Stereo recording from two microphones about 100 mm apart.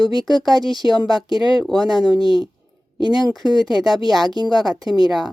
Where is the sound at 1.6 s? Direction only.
Centre (ahead or behind).